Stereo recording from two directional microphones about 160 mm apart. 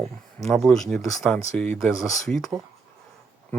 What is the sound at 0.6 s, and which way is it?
Speech, 5° left (ahead or behind).